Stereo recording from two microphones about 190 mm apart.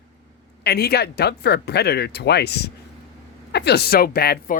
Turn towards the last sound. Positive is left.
turn(degrees=55)  # may be behind; listen again after turning